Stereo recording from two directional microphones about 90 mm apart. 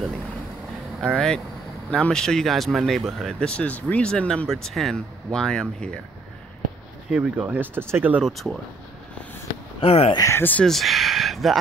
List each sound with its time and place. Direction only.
1.0 s speech: 5° left (ahead or behind)
7.1 s speech: 15° right (ahead or behind)
8.2 s speech: centre (ahead or behind)
9.8 s speech: 90° left
10.2 s speech: 30° left (ahead or behind)
10.7 s speech: centre (ahead or behind)